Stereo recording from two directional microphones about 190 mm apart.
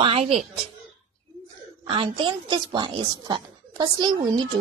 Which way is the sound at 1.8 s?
25° right (ahead or behind).